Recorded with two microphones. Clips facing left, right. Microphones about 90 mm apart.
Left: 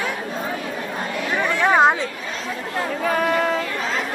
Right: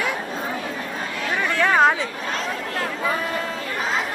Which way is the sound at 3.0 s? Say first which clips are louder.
Left 7 dB; 70° left (ahead or behind).